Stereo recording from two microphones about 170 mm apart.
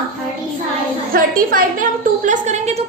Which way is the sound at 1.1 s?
55° right (ahead or behind).